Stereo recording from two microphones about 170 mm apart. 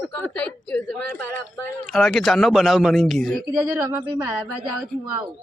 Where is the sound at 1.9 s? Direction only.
Centre (ahead or behind).